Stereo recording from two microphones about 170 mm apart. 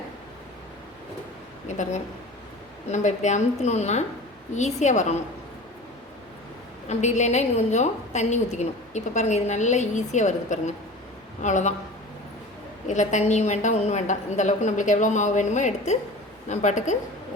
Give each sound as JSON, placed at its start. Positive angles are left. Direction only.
{"t": 1.6, "sound": "a woman's voice", "side_deg": 45}
{"t": 6.8, "sound": "a woman's voice", "side_deg": 45}
{"t": 12.9, "sound": "a woman's voice", "side_deg": 45}